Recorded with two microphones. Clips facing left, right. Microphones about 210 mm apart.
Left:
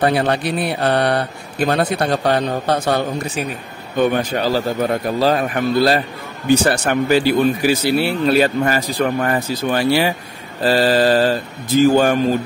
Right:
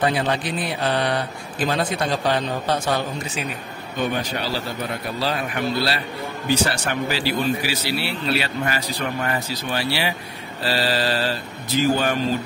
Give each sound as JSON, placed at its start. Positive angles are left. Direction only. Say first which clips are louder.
{"t": 0.0, "sound": "speech", "louder": "left 5 dB", "side_deg": 60}